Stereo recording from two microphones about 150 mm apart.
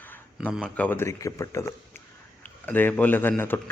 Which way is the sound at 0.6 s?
10° left (ahead or behind).